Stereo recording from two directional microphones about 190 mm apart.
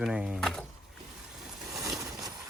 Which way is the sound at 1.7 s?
Centre (ahead or behind).